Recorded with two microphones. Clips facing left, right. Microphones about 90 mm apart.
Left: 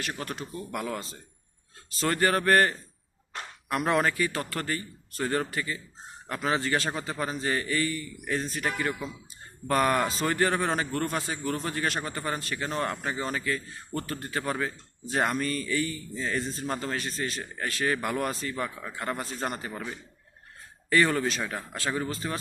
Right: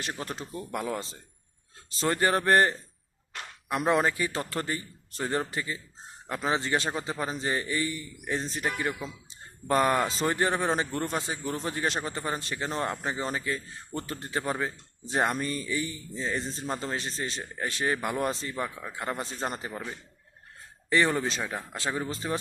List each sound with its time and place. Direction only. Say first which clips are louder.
0.0 s speech: left 1 dB; 25° right (ahead or behind)
20.9 s speech: left 1 dB; 25° right (ahead or behind)